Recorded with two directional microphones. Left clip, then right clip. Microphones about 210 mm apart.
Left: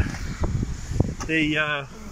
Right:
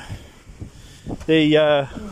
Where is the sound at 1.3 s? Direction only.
35° right (ahead or behind).